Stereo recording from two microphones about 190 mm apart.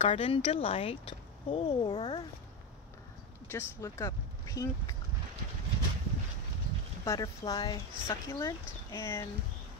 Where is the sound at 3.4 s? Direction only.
15° left (ahead or behind).